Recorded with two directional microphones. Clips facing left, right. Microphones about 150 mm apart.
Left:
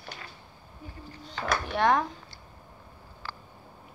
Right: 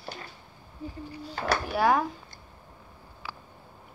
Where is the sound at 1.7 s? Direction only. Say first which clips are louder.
Even; 5° right (ahead or behind).